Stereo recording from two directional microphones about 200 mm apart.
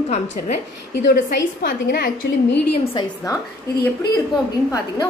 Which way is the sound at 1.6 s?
50° left (ahead or behind).